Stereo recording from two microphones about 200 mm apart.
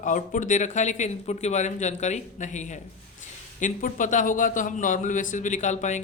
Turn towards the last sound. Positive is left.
turn(degrees=35)  # may be behind; listen again after turning